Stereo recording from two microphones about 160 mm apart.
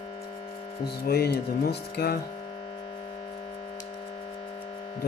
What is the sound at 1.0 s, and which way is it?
Speech, 85° left.